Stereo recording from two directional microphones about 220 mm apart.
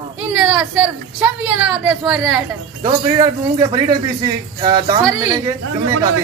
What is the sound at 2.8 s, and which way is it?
Speech, 20° right (ahead or behind).